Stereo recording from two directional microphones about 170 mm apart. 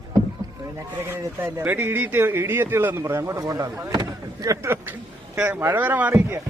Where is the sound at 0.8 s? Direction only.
15° right (ahead or behind).